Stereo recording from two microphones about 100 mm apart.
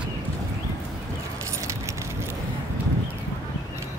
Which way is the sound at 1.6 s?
30° right (ahead or behind).